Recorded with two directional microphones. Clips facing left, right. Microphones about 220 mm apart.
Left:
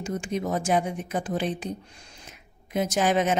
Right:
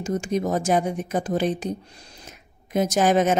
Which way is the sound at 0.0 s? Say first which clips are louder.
Right 5 dB; 40° right (ahead or behind).